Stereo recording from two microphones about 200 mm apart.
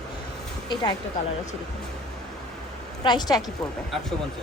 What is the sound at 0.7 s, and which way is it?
Speech, 20° left (ahead or behind).